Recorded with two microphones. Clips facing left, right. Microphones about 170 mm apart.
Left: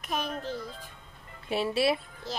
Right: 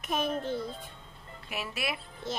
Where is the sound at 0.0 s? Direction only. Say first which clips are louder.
Right 2 dB; centre (ahead or behind).